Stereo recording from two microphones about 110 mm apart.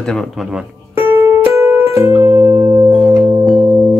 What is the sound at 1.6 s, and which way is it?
Music, 20° right (ahead or behind).